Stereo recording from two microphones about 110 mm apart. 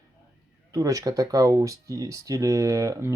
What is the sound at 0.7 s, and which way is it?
Speech, 30° right (ahead or behind).